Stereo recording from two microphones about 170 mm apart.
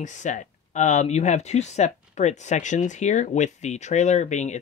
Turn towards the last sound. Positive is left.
turn(degrees=45)  # may be behind; listen again after turning